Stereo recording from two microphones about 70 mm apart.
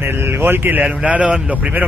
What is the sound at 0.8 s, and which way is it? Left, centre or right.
Speech, centre.